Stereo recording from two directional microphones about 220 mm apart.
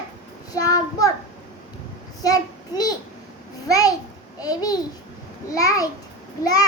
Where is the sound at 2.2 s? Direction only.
15° left (ahead or behind).